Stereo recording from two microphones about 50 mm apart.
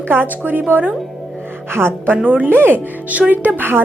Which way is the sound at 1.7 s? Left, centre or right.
Right.